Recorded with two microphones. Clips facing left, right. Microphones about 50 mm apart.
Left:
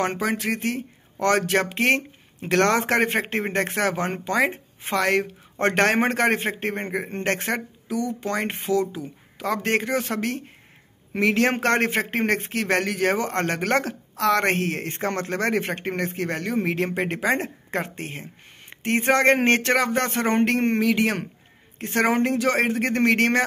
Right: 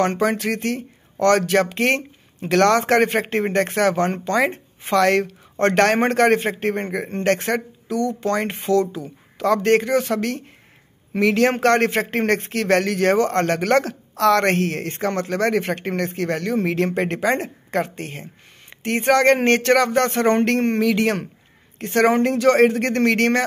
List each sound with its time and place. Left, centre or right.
0.2 s speech: centre
1.4 s speech: left
17.3 s a woman's voice: left